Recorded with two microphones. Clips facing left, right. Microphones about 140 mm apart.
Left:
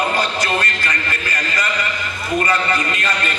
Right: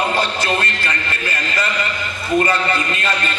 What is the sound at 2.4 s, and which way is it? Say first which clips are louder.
Speech: even; 30° right (ahead or behind).